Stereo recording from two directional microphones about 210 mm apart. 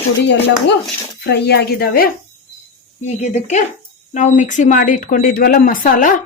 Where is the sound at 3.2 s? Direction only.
35° left (ahead or behind).